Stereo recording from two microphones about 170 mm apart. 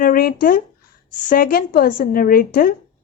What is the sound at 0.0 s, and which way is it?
A woman's voice, 60° left (ahead or behind).